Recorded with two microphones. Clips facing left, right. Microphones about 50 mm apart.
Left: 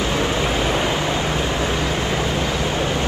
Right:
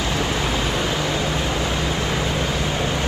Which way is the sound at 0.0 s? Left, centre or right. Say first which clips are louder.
Left 2 dB; left.